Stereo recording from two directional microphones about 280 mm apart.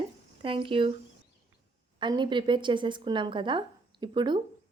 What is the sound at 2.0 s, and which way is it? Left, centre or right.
A woman's voice, centre.